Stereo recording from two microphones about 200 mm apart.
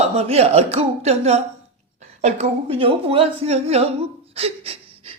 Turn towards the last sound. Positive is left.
turn(degrees=-30)  # may be behind; listen again after turning